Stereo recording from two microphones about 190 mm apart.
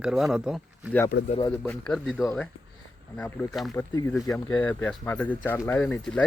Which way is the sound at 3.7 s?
20° left (ahead or behind).